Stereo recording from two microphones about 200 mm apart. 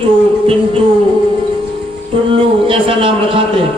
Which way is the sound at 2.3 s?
25° right (ahead or behind).